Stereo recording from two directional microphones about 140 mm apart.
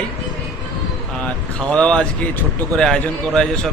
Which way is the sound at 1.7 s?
5° left (ahead or behind).